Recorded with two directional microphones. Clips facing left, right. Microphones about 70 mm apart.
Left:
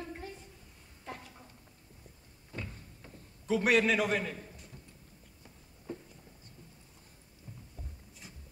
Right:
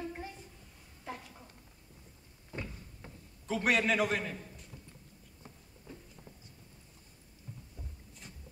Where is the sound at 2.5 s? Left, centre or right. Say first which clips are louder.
Right 1 dB; right.